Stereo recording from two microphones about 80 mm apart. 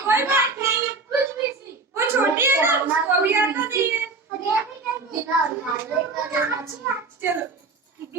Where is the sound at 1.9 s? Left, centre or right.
Right.